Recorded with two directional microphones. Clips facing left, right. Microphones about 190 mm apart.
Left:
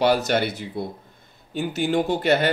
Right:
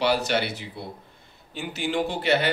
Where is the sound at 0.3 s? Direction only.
45° left (ahead or behind).